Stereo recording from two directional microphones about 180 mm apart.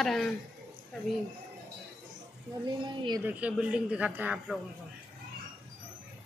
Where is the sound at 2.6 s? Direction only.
25° right (ahead or behind).